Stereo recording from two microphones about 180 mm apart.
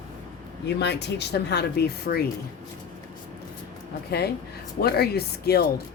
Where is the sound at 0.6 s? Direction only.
70° left (ahead or behind).